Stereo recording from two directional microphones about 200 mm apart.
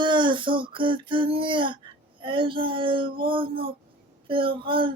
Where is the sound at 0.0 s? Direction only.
25° right (ahead or behind).